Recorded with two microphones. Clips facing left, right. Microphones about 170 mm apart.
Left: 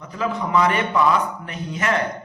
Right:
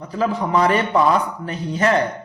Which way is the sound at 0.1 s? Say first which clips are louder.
Right 2 dB; 35° right (ahead or behind).